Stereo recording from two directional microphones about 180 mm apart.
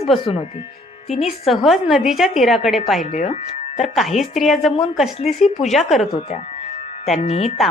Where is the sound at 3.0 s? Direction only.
40° left (ahead or behind).